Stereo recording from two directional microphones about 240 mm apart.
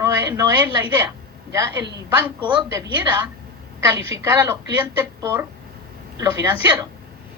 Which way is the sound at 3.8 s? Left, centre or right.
Centre.